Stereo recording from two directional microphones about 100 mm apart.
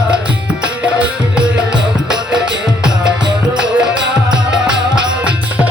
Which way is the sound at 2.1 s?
5° right (ahead or behind).